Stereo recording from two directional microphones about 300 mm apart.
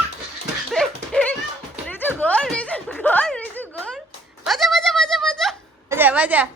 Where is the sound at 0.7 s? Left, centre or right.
Centre.